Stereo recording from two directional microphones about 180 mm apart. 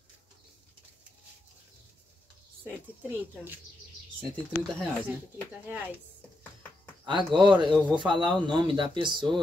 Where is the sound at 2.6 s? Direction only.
10° right (ahead or behind).